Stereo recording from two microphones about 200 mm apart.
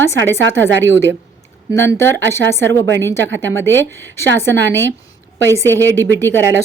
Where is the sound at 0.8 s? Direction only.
65° right (ahead or behind).